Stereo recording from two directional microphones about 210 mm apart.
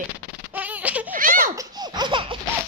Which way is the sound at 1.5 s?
15° right (ahead or behind).